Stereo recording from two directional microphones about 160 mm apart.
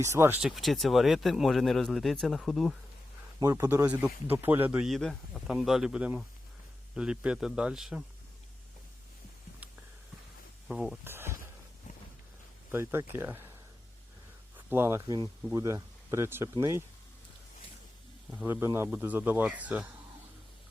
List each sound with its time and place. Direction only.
0.0 s speech: 15° right (ahead or behind)
0.4 s speech: centre (ahead or behind)
3.4 s speech: 15° right (ahead or behind)
10.7 s speech: 5° right (ahead or behind)
11.0 s a sound: 15° right (ahead or behind)
12.7 s speech: 15° right (ahead or behind)
14.7 s speech: 15° right (ahead or behind)
15.0 s speech: 25° right (ahead or behind)
18.3 s speech: 10° right (ahead or behind)